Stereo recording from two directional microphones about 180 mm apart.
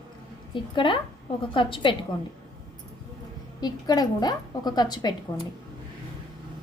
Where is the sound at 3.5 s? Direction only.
20° left (ahead or behind).